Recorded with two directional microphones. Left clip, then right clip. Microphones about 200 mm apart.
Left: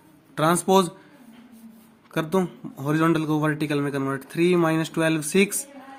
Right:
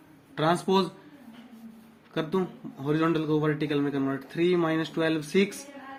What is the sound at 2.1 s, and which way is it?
A man's voice, 45° left (ahead or behind).